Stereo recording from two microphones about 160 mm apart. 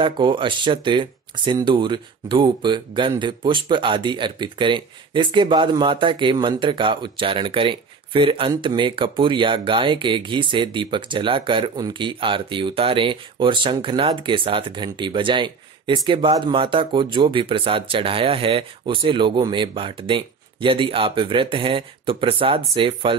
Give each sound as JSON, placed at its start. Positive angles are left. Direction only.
{"t": 0.0, "sound": "speech", "side_deg": -30}